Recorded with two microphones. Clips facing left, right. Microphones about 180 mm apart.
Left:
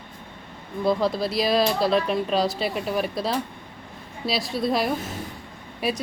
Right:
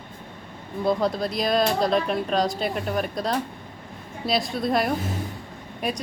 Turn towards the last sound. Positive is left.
turn(degrees=5)  # may be behind; listen again after turning